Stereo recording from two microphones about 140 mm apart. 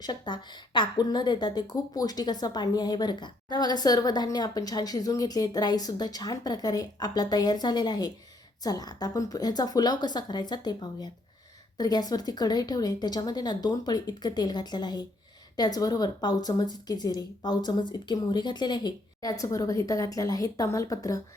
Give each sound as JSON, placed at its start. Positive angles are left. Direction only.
{"t": 0.0, "sound": "a woman's voice", "side_deg": 30}